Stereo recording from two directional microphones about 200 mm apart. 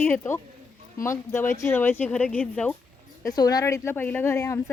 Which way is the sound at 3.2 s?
20° left (ahead or behind).